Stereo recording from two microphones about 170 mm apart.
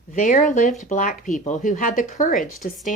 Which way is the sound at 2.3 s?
Centre (ahead or behind).